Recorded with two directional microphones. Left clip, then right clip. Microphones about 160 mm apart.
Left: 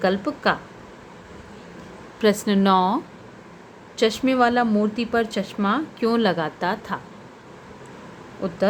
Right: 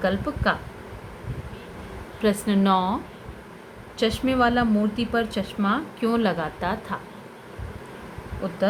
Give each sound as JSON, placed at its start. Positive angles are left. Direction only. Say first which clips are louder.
{"t": 0.0, "sound": "speech", "louder": "left 3 dB", "side_deg": 45}
{"t": 2.2, "sound": "speech", "louder": "left 3 dB", "side_deg": 40}
{"t": 8.4, "sound": "speech", "louder": "left 3 dB", "side_deg": 45}